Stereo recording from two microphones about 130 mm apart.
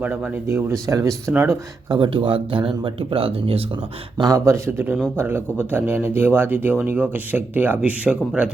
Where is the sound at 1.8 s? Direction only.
40° right (ahead or behind).